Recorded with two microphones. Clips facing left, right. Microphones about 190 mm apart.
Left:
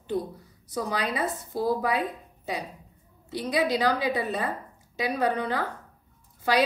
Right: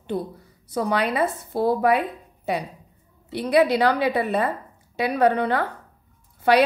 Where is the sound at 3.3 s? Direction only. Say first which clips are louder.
Right 7 dB; 65° right (ahead or behind).